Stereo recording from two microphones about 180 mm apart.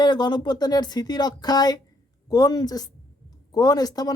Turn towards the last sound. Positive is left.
turn(degrees=20)  # may be behind; listen again after turning